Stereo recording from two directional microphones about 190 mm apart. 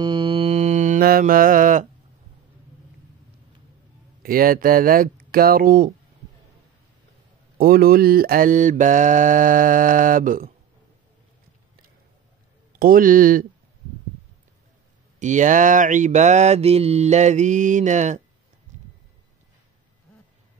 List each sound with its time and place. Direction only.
0.0 s mantra: 25° right (ahead or behind); by 1.9 s 45° right (ahead or behind)
4.2 s mantra: 50° right (ahead or behind)
7.5 s mantra: 50° right (ahead or behind)
12.7 s mantra: 50° right (ahead or behind)
15.1 s mantra: 40° right (ahead or behind)
18.7 s a sound: 40° right (ahead or behind)